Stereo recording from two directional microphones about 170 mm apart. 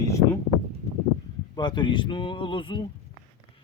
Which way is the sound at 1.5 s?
25° left (ahead or behind).